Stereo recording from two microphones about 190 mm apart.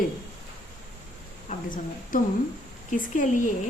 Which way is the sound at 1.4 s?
45° left (ahead or behind).